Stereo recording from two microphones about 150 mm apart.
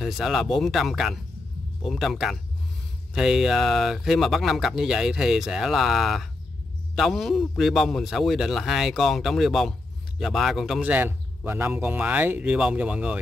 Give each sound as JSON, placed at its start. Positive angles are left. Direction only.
{"t": 0.0, "sound": "a man's voice", "side_deg": 0}
{"t": 10.9, "sound": "speech", "side_deg": -15}